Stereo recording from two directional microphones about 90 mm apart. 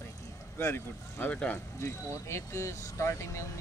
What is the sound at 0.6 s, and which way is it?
Speech, 25° left (ahead or behind).